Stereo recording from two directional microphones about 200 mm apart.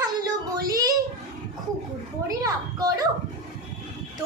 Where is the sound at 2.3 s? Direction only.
20° right (ahead or behind).